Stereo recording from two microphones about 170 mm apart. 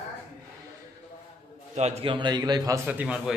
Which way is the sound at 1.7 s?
40° right (ahead or behind).